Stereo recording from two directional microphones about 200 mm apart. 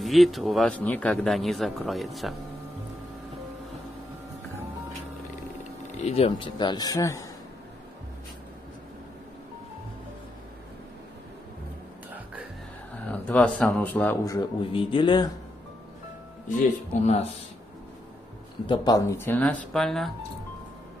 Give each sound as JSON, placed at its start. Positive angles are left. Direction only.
{"t": 0.0, "sound": "speech", "side_deg": 0}
{"t": 6.0, "sound": "speech", "side_deg": 30}
{"t": 13.1, "sound": "speech", "side_deg": 5}
{"t": 17.0, "sound": "speech", "side_deg": 35}
{"t": 18.7, "sound": "speech", "side_deg": 20}